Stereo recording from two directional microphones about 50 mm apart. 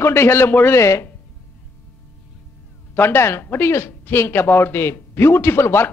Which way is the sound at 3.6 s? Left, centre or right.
Left.